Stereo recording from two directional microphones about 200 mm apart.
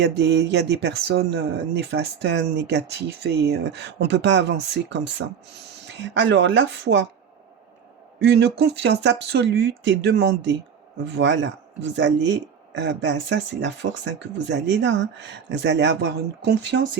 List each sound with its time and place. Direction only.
0.0 s speech: 60° right (ahead or behind)
8.2 s speech: 55° right (ahead or behind)